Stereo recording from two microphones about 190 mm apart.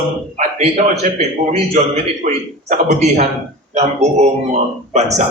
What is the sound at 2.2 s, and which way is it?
A man's voice, 40° right (ahead or behind).